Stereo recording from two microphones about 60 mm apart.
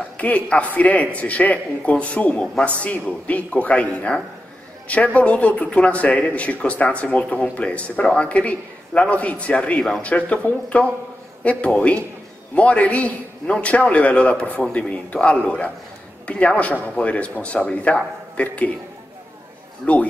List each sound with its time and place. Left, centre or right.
0.2 s speech: left
19.8 s speech: left